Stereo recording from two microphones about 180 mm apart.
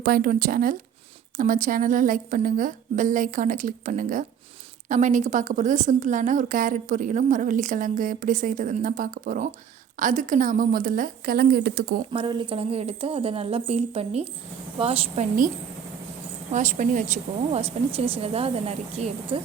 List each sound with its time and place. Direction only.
0.0 s a woman's voice: 55° right (ahead or behind)
12.1 s speech: 30° right (ahead or behind)
16.5 s a woman's voice: 45° right (ahead or behind)
17.5 s speech: 35° right (ahead or behind)